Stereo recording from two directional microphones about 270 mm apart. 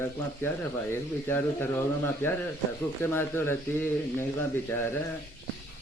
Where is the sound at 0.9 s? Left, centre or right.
Centre.